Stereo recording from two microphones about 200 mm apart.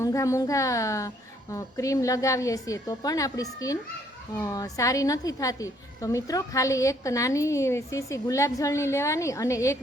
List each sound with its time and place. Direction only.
0.0 s a woman's voice: 15° left (ahead or behind)